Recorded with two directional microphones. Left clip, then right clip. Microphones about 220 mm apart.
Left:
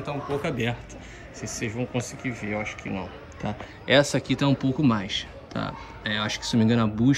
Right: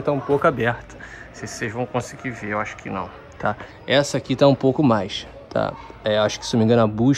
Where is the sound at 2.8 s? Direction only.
Centre (ahead or behind).